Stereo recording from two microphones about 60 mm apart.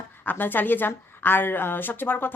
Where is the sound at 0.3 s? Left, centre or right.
Left.